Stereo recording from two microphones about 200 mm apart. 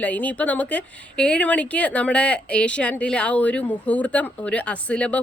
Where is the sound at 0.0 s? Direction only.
5° left (ahead or behind).